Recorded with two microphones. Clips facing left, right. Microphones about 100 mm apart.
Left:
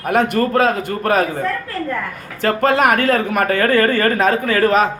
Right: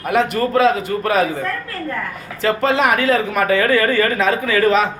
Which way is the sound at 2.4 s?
50° left (ahead or behind).